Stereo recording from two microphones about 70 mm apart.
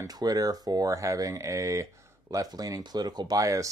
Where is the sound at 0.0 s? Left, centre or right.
Right.